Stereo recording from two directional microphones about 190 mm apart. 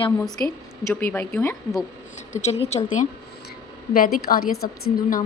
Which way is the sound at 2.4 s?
35° left (ahead or behind).